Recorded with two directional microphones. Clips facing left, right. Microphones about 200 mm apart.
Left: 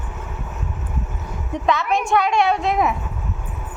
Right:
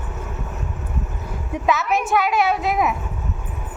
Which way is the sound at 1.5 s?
5° right (ahead or behind).